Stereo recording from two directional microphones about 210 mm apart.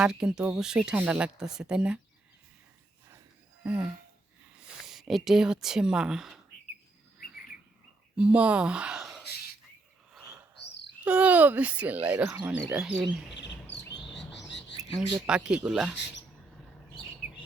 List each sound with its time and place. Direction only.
0.0 s speech: 5° right (ahead or behind)
3.6 s speech: 5° right (ahead or behind)
8.1 s speech: 5° right (ahead or behind)
11.0 s speech: 5° right (ahead or behind)
13.3 s chirp: 55° left (ahead or behind)
14.3 s bird: 55° left (ahead or behind)
15.3 s speech: 5° right (ahead or behind)